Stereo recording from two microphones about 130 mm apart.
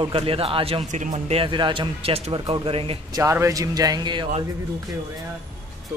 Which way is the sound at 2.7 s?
45° right (ahead or behind).